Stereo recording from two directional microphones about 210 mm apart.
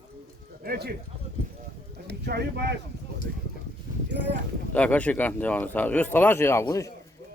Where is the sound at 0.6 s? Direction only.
45° right (ahead or behind).